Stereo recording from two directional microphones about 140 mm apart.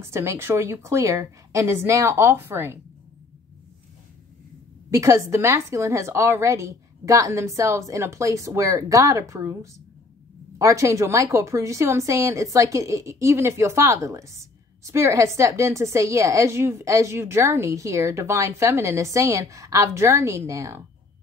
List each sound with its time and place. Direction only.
0.0 s a woman's voice: 20° right (ahead or behind)
4.9 s a woman's voice: 20° right (ahead or behind)